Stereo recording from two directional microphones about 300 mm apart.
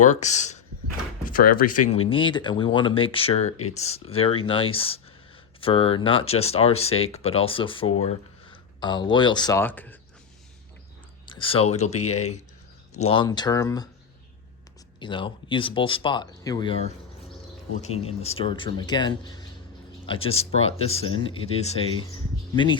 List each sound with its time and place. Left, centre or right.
0.0 s speech: left
2.0 s speech: centre
11.3 s speech: centre
14.9 s speech: centre